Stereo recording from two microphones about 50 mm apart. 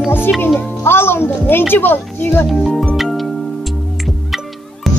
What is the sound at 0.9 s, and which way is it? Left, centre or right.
Speech, left.